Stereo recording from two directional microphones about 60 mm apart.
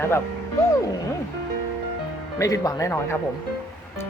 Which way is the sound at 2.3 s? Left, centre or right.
Left.